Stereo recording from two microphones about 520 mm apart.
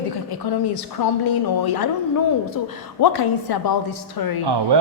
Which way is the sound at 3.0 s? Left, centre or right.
Left.